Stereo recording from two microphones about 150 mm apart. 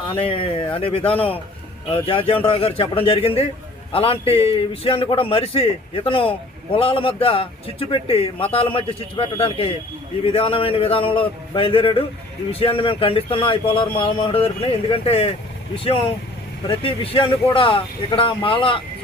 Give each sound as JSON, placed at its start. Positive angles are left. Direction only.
{"t": 0.2, "sound": "a man's voice", "side_deg": 40}